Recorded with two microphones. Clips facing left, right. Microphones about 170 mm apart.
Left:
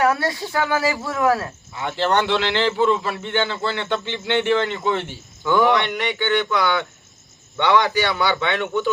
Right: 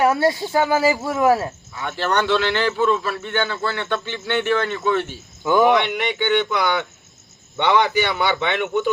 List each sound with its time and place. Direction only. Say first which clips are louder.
0.0 s speech: right 3 dB; 25° right (ahead or behind)
1.8 s a man's voice: left 2 dB; 20° left (ahead or behind)
5.4 s a man's voice: right 2 dB; 20° right (ahead or behind)